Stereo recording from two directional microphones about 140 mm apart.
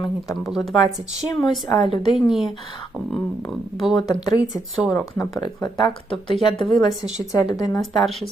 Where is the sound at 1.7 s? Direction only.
35° left (ahead or behind).